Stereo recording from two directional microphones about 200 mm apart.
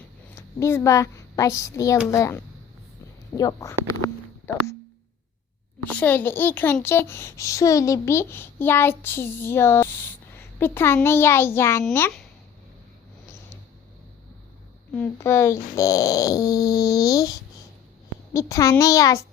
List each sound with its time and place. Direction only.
0.3 s a woman's voice: 10° left (ahead or behind)
4.0 s a sound: 15° left (ahead or behind)
5.9 s a child's voice: 10° left (ahead or behind)
14.9 s a child's voice: 10° left (ahead or behind)